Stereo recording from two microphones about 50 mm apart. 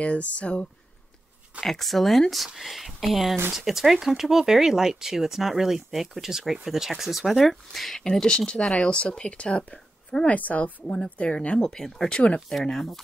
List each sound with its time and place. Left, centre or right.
0.0 s a woman's voice: left
1.6 s a woman's voice: centre; by 11.6 s left
11.6 s speech: centre